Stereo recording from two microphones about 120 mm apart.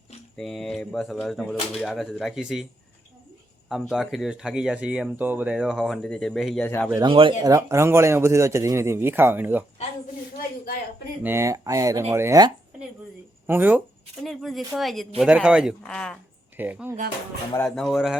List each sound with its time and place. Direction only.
0.3 s speech: 5° left (ahead or behind)
3.7 s speech: 5° right (ahead or behind)
5.5 s speech: centre (ahead or behind)
7.0 s speech: 45° right (ahead or behind)
7.4 s a man's voice: 25° right (ahead or behind)
11.2 s a man's voice: 20° right (ahead or behind)
13.5 s speech: 15° right (ahead or behind)
14.2 s speech: centre (ahead or behind)
15.8 s speech: 10° left (ahead or behind)
16.6 s speech: 15° right (ahead or behind)
17.7 s speech: centre (ahead or behind)